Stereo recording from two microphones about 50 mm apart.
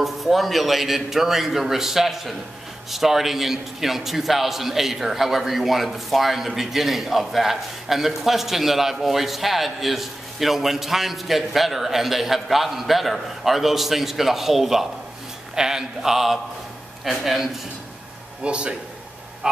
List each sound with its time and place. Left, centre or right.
0.0 s a man's voice: centre
18.4 s a man's voice: right